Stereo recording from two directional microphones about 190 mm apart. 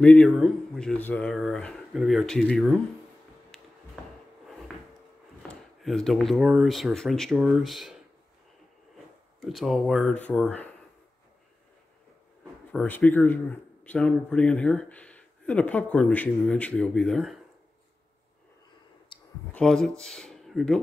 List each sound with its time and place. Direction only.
0.0 s speech: 5° left (ahead or behind)
3.5 s a sound: centre (ahead or behind)
5.5 s speech: centre (ahead or behind)
9.4 s speech: centre (ahead or behind)
12.7 s speech: 10° left (ahead or behind)
19.1 s clicking: 25° left (ahead or behind)
19.5 s speech: 5° left (ahead or behind)